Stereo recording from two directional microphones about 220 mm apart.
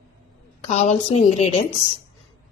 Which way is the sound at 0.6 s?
30° left (ahead or behind).